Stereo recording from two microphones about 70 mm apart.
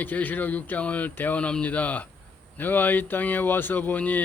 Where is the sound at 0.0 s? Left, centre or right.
Left.